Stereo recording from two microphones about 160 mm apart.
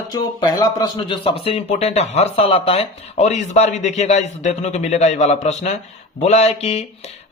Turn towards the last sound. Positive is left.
turn(degrees=40)  # may be behind; listen again after turning